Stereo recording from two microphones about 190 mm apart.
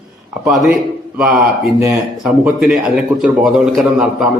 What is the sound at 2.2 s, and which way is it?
A man's voice, 5° right (ahead or behind).